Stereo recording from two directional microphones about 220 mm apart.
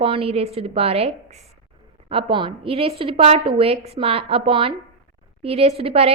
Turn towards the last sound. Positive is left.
turn(degrees=-25)  # may be behind; listen again after turning